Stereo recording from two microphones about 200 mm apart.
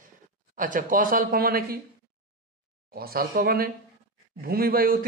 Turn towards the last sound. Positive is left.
turn(degrees=-45)  # may be behind; listen again after turning